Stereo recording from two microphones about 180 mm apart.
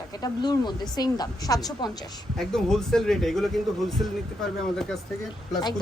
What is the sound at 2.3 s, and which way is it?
Speech, centre (ahead or behind).